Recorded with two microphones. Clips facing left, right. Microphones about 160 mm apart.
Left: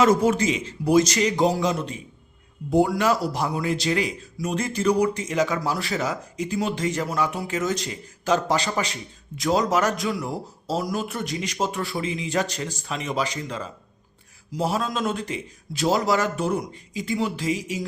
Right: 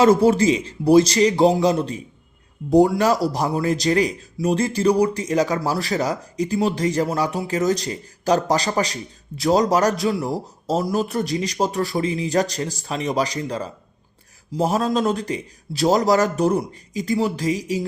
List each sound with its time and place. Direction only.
0.0 s a man's voice: 30° right (ahead or behind)